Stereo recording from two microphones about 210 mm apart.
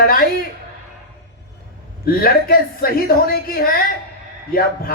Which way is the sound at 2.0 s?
45° left (ahead or behind).